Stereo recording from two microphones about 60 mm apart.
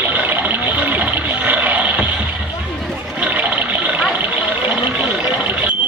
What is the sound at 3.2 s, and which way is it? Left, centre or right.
Toilet flush, right.